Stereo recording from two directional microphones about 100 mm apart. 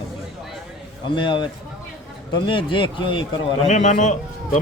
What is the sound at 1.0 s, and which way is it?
Speech, 55° left (ahead or behind).